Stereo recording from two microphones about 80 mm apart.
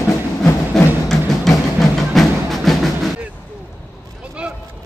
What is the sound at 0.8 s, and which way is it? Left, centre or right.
Music, centre.